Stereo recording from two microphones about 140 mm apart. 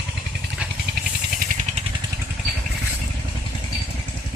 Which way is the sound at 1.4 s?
70° right (ahead or behind).